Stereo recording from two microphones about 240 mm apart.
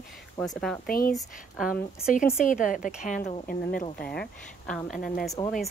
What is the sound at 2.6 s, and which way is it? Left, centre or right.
Speech, left.